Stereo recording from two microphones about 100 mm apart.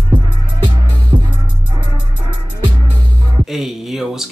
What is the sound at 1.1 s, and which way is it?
Music, 50° right (ahead or behind).